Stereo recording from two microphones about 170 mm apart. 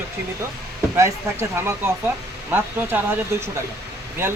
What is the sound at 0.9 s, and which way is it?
Speech, 15° right (ahead or behind).